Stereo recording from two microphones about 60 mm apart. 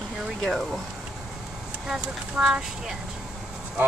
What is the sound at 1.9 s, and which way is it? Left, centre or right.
Speech, centre.